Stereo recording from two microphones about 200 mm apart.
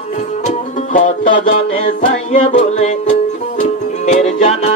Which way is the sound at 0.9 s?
40° left (ahead or behind).